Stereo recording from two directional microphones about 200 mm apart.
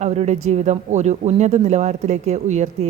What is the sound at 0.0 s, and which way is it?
Speech, 35° right (ahead or behind).